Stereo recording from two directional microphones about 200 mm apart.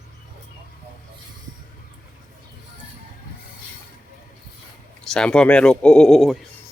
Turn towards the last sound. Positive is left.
turn(degrees=0)  # may be behind; listen again after turning